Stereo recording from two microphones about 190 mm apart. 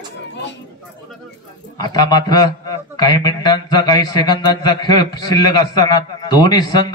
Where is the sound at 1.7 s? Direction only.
20° left (ahead or behind).